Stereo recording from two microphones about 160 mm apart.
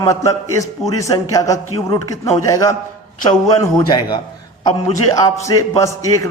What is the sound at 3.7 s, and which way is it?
Speech, 25° left (ahead or behind).